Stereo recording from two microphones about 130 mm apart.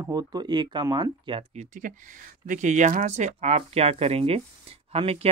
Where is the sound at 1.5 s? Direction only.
65° right (ahead or behind).